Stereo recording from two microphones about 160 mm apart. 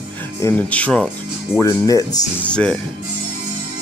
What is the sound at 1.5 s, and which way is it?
Speech, 20° left (ahead or behind).